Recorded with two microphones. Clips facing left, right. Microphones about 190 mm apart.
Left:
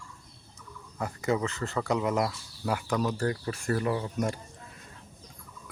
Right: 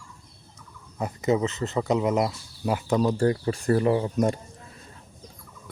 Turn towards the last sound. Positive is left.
turn(degrees=-30)  # may be behind; listen again after turning